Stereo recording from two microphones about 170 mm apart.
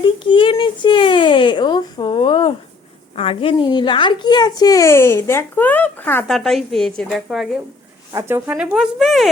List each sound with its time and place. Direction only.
0.3 s speech: 30° left (ahead or behind); by 9.3 s centre (ahead or behind)